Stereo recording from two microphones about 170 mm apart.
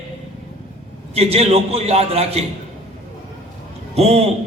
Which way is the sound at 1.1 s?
35° right (ahead or behind).